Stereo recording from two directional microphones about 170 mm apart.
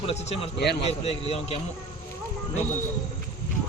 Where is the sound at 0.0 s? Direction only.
40° left (ahead or behind).